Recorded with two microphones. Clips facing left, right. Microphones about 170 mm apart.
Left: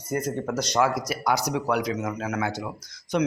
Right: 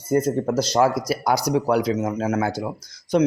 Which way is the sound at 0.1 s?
30° right (ahead or behind).